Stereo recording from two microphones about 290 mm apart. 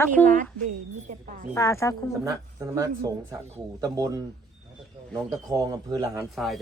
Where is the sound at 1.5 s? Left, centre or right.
Centre.